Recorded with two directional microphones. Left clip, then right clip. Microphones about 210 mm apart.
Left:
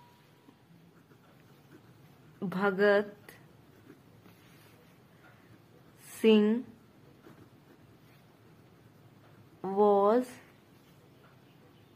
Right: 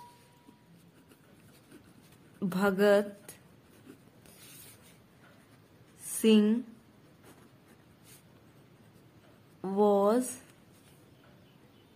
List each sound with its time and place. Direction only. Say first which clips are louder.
2.4 s speech: even; 15° right (ahead or behind)
6.0 s a woman's voice: left 1 dB; 10° right (ahead or behind)
9.6 s a sound: left 1 dB; 10° right (ahead or behind)